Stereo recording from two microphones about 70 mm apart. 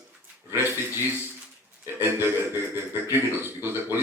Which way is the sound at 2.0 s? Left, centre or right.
Right.